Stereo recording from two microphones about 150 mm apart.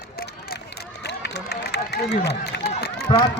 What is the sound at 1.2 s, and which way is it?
Run, 90° left.